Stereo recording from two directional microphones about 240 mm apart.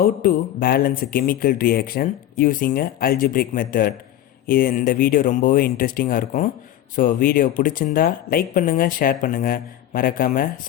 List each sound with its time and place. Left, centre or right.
0.0 s speech: left